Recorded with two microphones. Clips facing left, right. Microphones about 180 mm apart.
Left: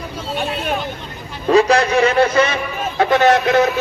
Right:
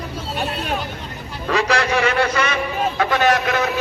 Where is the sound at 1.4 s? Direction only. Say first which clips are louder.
Left 6 dB; 25° left (ahead or behind).